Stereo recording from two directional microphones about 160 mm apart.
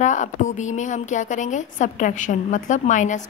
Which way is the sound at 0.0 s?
50° left (ahead or behind).